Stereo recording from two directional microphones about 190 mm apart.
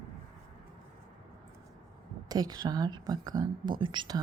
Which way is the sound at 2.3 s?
20° right (ahead or behind).